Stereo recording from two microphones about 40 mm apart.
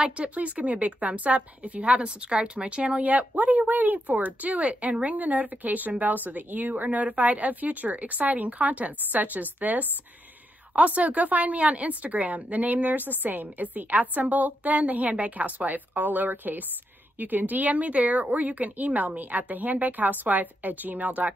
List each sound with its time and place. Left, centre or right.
0.0 s a woman's voice: right